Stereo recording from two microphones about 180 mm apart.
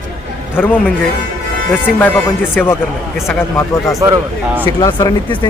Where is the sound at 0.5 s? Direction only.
10° left (ahead or behind).